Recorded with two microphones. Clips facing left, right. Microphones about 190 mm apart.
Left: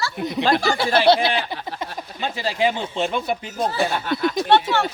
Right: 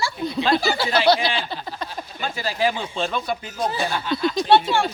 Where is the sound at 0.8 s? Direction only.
55° left (ahead or behind).